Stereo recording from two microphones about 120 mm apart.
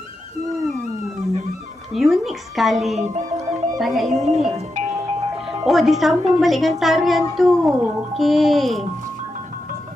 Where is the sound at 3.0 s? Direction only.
75° right (ahead or behind).